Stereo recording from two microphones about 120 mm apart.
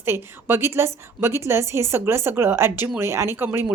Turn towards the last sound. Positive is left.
turn(degrees=-20)  # may be behind; listen again after turning